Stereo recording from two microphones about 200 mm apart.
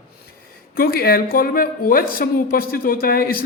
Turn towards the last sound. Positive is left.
turn(degrees=45)  # may be behind; listen again after turning